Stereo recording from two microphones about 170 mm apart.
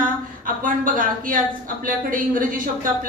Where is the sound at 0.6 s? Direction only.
55° right (ahead or behind).